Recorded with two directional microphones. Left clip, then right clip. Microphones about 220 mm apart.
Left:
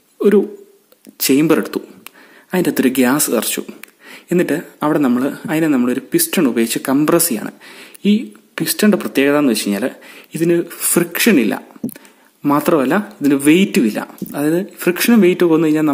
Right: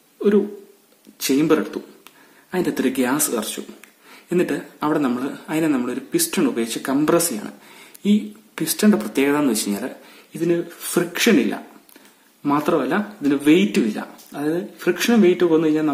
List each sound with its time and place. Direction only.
1.2 s speech: 40° left (ahead or behind)